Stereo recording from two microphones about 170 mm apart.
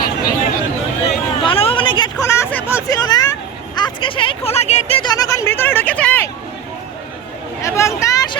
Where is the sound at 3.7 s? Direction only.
30° left (ahead or behind).